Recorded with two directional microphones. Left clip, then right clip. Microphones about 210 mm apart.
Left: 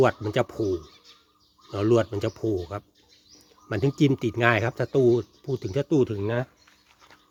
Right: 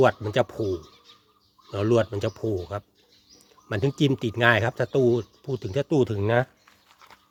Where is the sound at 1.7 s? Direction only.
5° right (ahead or behind).